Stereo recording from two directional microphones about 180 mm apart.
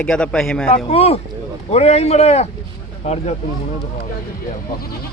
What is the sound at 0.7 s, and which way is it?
A man's voice, 35° left (ahead or behind).